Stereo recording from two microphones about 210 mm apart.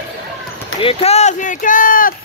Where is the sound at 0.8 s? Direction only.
30° left (ahead or behind).